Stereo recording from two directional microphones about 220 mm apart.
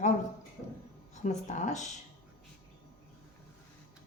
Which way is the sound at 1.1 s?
30° left (ahead or behind).